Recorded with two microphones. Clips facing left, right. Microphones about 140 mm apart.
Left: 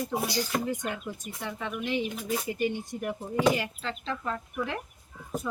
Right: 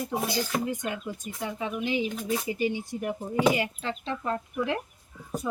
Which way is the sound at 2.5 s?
10° right (ahead or behind).